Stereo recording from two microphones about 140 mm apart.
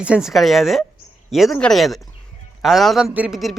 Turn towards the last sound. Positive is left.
turn(degrees=-5)  # may be behind; listen again after turning